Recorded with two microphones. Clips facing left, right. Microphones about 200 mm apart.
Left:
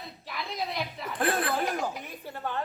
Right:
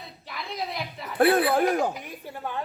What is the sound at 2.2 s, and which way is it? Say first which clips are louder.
Speech: even; 10° right (ahead or behind).